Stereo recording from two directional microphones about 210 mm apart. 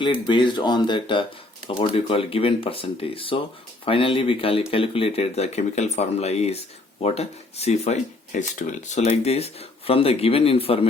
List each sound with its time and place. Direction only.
0.0 s speech: 20° left (ahead or behind)